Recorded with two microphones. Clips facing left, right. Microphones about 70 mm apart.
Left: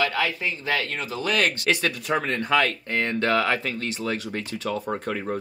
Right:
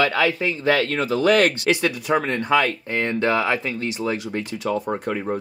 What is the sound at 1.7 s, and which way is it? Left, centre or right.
Speech, centre.